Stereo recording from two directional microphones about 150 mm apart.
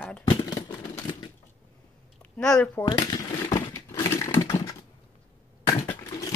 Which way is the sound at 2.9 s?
30° left (ahead or behind).